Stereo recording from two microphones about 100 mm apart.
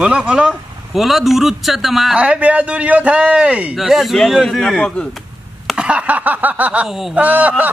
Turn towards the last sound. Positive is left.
turn(degrees=-15)  # may be behind; listen again after turning